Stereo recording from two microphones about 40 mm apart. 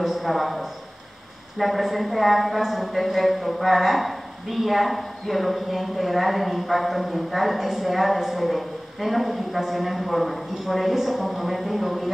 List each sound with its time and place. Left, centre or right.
0.0 s a man's voice: centre
2.6 s a woman's voice: centre